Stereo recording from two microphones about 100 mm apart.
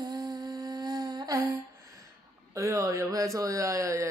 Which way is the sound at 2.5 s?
30° right (ahead or behind).